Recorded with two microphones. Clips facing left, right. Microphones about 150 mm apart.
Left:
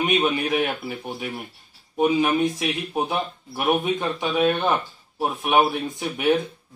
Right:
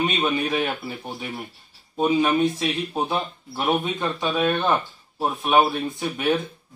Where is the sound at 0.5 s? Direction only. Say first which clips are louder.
Left 1 dB; 10° left (ahead or behind).